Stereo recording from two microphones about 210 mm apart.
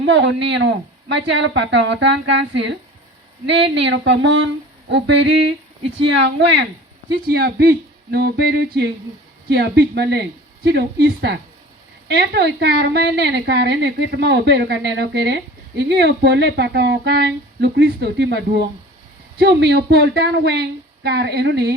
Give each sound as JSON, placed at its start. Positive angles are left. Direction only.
{"t": 0.0, "sound": "a woman's voice", "side_deg": -60}